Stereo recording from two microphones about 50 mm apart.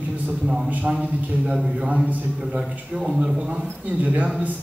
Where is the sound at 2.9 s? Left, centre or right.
Centre.